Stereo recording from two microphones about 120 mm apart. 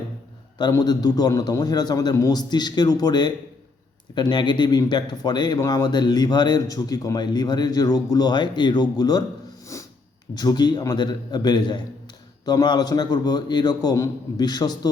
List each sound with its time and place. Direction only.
0.7 s speech: 35° left (ahead or behind)
9.7 s a sound: 25° left (ahead or behind)
10.3 s speech: 35° left (ahead or behind)